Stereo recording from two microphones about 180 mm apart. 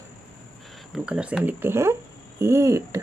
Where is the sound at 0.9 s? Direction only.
5° right (ahead or behind).